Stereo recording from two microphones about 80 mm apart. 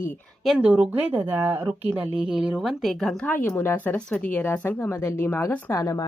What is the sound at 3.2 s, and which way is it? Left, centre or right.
Speech, left.